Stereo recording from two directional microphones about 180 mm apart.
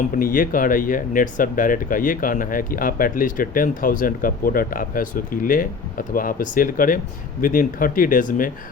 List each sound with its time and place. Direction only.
0.2 s speech: 50° left (ahead or behind)